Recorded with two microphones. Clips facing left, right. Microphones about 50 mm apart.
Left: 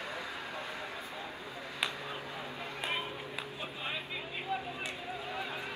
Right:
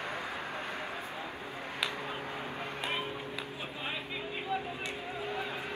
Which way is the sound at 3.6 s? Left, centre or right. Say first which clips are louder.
Even; centre.